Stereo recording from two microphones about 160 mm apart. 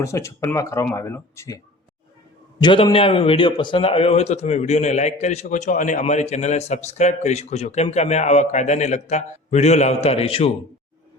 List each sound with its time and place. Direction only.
0.0 s a man's voice: 20° left (ahead or behind); by 10.5 s 40° left (ahead or behind)